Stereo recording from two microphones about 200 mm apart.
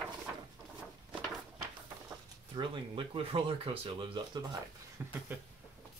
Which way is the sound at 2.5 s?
25° right (ahead or behind).